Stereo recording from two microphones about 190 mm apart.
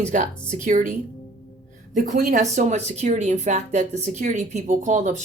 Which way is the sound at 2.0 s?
40° right (ahead or behind).